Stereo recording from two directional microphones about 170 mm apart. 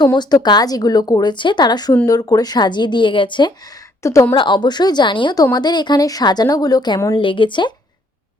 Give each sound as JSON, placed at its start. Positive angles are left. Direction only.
{"t": 0.0, "sound": "a woman's voice", "side_deg": 25}